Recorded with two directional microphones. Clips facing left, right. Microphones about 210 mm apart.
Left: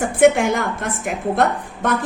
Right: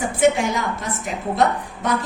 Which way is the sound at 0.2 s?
55° left (ahead or behind).